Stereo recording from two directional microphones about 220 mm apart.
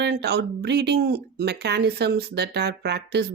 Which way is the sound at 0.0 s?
50° right (ahead or behind).